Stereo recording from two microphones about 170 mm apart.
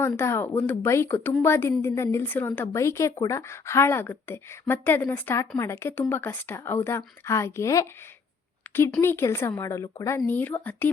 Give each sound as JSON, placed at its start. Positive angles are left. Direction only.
{"t": 0.2, "sound": "speech", "side_deg": 15}